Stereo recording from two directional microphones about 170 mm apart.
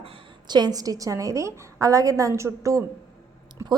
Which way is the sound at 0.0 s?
30° right (ahead or behind).